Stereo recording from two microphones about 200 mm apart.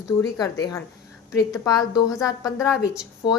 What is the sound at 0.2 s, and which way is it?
A woman's voice, 15° left (ahead or behind).